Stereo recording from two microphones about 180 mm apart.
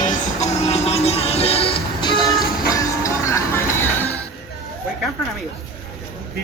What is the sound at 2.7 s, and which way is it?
Music, 15° left (ahead or behind).